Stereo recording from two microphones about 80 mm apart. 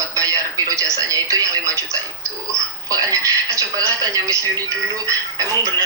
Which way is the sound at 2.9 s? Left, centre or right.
Right.